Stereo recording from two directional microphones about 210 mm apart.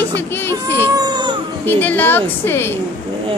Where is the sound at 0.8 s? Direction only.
20° right (ahead or behind).